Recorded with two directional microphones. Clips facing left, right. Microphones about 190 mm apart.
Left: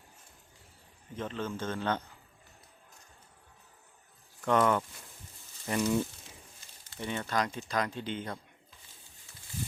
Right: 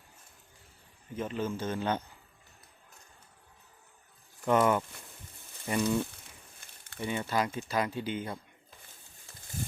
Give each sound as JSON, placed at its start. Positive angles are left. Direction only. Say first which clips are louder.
{"t": 1.1, "sound": "speech", "louder": "right 3 dB", "side_deg": -10}
{"t": 4.4, "sound": "speech", "louder": "right 1 dB", "side_deg": -10}
{"t": 6.6, "sound": "a sound", "louder": "right 1 dB", "side_deg": -60}
{"t": 7.0, "sound": "speech", "louder": "right 1 dB", "side_deg": -5}